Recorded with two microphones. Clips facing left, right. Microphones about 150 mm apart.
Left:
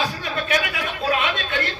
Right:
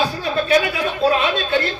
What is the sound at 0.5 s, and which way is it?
A woman's voice, 30° right (ahead or behind).